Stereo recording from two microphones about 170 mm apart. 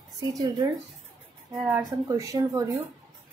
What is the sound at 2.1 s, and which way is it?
Speech, 20° right (ahead or behind).